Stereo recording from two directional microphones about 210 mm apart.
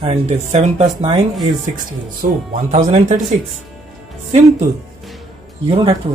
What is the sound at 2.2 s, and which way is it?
Speech, 35° right (ahead or behind).